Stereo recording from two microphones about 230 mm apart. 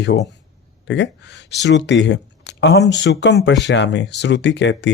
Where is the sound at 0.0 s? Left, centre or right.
Left.